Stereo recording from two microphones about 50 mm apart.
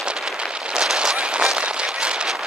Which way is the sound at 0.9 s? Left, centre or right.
Right.